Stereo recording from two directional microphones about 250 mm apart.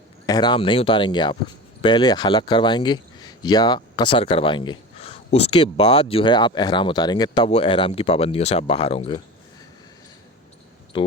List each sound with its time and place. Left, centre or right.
0.3 s speech: centre
10.9 s speech: centre